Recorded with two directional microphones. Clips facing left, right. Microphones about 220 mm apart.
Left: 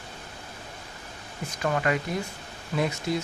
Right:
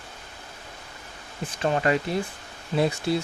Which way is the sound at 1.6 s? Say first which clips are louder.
Right 3 dB; 30° right (ahead or behind).